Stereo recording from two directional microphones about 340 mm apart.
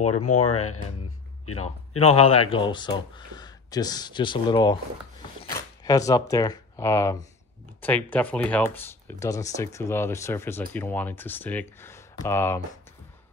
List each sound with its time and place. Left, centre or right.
0.1 s speech: left
2.0 s speech: centre